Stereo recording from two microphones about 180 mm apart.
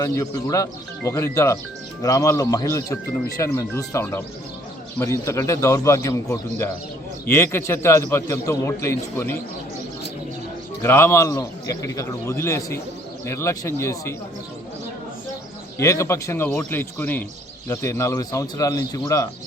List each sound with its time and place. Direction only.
0.0 s speech: 15° left (ahead or behind)
10.8 s speech: 15° left (ahead or behind)
15.8 s speech: 15° left (ahead or behind)